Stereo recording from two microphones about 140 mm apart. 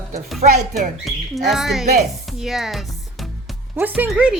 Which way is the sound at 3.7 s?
15° right (ahead or behind).